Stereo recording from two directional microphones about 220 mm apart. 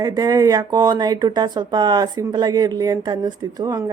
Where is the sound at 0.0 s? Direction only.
20° right (ahead or behind).